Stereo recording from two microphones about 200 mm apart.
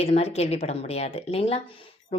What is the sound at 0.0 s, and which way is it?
Speech, 30° left (ahead or behind).